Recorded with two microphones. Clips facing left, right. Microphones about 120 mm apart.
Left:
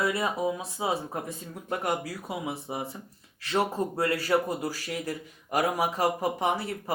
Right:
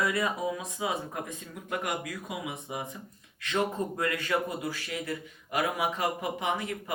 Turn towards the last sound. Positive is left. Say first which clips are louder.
# left 3 dB
turn(degrees=35)  # may be behind; listen again after turning